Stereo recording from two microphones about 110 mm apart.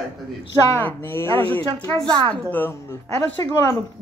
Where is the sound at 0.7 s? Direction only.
20° left (ahead or behind).